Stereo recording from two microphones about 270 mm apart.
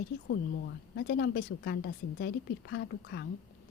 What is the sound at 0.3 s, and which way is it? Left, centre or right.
A woman's voice, left.